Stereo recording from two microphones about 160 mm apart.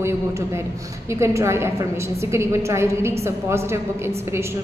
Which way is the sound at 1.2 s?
15° right (ahead or behind).